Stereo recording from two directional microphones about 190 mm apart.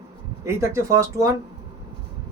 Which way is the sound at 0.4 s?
15° right (ahead or behind).